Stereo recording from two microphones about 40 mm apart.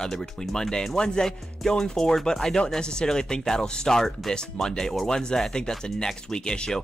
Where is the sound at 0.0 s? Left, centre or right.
Centre.